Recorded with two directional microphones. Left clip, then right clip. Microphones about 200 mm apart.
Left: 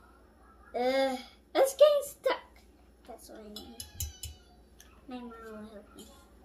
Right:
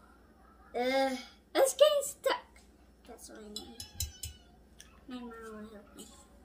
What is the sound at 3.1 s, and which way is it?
Dishes, 5° right (ahead or behind).